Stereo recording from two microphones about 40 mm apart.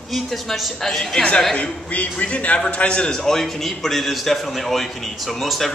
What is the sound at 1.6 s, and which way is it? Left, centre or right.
A man's voice, left.